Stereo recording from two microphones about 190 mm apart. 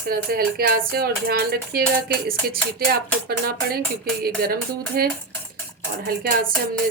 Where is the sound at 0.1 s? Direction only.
55° right (ahead or behind).